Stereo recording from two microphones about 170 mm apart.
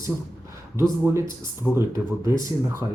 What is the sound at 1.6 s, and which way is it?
Speech, 5° left (ahead or behind).